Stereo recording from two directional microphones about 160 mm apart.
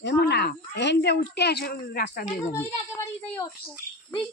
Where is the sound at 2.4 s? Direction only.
15° left (ahead or behind).